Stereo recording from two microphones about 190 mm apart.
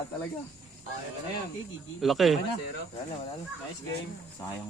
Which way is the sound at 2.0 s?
Centre (ahead or behind).